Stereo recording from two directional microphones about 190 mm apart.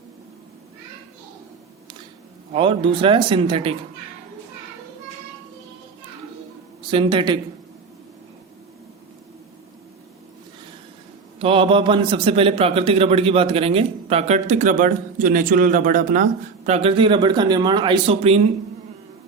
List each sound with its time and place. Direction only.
2.5 s a man's voice: 30° right (ahead or behind)
6.9 s a man's voice: 25° right (ahead or behind)
11.3 s a man's voice: 30° right (ahead or behind)